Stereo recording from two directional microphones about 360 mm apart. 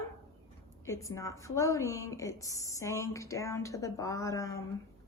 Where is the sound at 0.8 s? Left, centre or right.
Centre.